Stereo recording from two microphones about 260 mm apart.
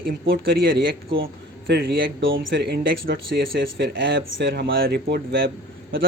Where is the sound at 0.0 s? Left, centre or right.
Right.